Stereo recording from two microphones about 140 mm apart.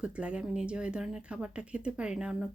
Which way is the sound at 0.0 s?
10° right (ahead or behind).